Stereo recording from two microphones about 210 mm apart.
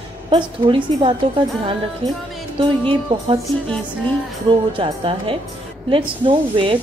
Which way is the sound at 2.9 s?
25° right (ahead or behind).